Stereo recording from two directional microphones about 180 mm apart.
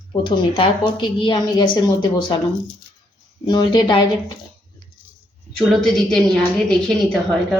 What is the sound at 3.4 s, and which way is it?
Speech, 25° left (ahead or behind).